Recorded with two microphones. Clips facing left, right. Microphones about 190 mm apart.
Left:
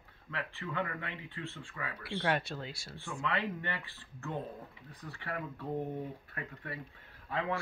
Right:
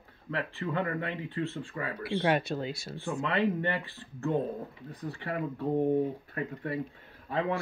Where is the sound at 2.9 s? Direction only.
40° right (ahead or behind).